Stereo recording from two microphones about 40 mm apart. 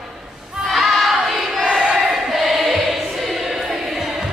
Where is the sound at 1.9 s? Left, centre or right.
Centre.